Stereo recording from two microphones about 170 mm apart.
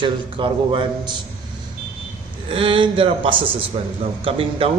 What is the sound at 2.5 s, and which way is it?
Speech, 30° right (ahead or behind).